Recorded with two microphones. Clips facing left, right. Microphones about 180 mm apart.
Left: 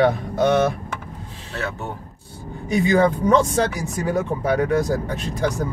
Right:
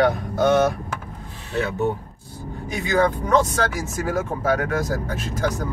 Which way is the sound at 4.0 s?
25° left (ahead or behind).